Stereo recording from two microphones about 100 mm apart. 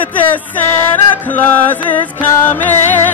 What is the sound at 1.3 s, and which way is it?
Music, 20° left (ahead or behind).